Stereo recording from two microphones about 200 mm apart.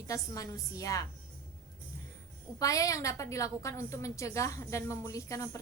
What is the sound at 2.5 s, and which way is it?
A woman's voice, 15° left (ahead or behind).